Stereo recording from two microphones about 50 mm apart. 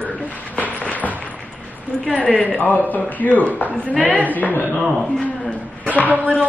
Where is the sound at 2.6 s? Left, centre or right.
Left.